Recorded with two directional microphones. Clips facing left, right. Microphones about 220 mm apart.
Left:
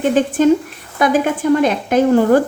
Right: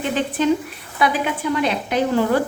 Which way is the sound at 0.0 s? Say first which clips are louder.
Left 7 dB; 45° left (ahead or behind).